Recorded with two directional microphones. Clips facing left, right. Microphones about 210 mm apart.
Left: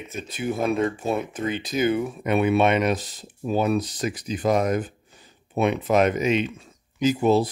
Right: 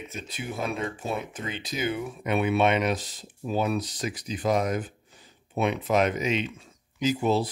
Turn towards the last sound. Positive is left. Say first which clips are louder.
# left 5 dB
turn(degrees=45)  # may be behind; listen again after turning